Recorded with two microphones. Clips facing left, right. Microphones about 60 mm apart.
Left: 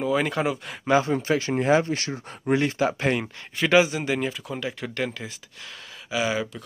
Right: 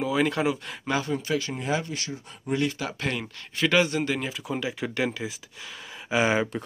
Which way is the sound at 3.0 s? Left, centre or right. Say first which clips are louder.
Left 6 dB; left.